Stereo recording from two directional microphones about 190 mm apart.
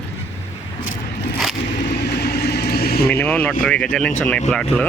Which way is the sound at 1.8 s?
60° left (ahead or behind).